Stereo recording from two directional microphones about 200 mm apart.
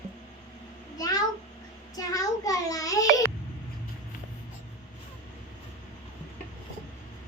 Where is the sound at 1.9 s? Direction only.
15° left (ahead or behind).